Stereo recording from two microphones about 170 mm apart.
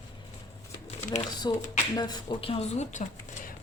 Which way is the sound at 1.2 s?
25° left (ahead or behind).